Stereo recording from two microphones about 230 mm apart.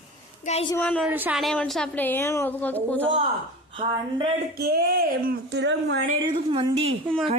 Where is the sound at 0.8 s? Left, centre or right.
Centre.